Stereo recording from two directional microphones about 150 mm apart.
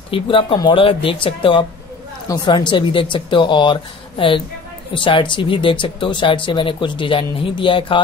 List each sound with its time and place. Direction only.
0.1 s speech: 35° left (ahead or behind)